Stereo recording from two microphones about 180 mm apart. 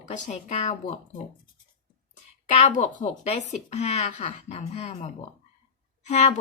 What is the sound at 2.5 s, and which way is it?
Speech, 40° left (ahead or behind).